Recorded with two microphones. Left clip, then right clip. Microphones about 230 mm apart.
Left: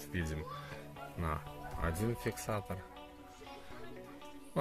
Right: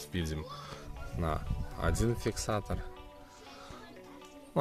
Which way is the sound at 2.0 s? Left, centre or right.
Right.